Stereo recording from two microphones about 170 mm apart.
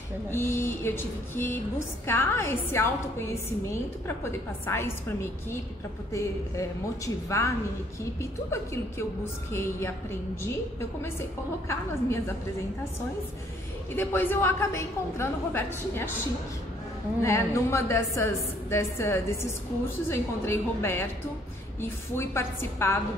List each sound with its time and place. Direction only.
0.3 s a woman's voice: 15° left (ahead or behind)
7.2 s a woman's voice: 15° left (ahead or behind)
11.0 s a woman's voice: 15° left (ahead or behind)
13.9 s a woman's voice: 10° left (ahead or behind)
17.2 s a woman's voice: 15° left (ahead or behind)